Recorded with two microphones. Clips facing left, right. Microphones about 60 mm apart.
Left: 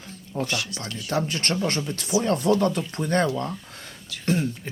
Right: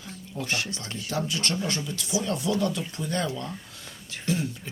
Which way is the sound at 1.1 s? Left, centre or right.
Left.